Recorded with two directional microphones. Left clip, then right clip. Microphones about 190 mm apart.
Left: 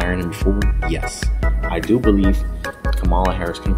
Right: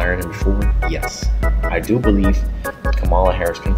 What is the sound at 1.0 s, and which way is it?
Music, centre (ahead or behind).